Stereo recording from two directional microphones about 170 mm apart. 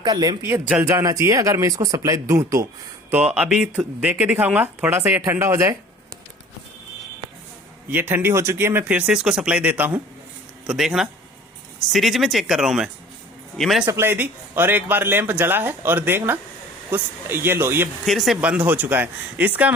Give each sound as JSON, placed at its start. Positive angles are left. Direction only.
{"t": 0.0, "sound": "speech", "side_deg": -25}
{"t": 7.9, "sound": "speech", "side_deg": -10}
{"t": 13.8, "sound": "speech", "side_deg": -15}
{"t": 18.0, "sound": "speech", "side_deg": 0}